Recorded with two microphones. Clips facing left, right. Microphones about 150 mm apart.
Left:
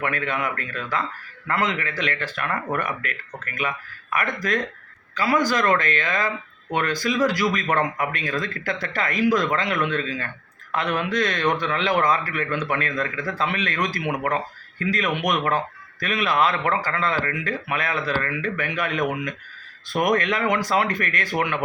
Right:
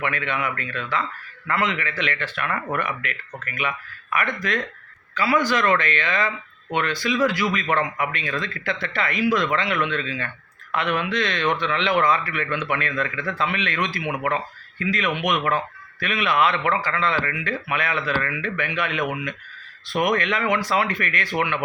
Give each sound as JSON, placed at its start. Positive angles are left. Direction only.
{"t": 0.0, "sound": "a man's voice", "side_deg": 40}